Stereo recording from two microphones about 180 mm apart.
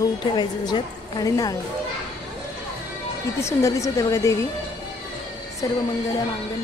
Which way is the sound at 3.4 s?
15° left (ahead or behind).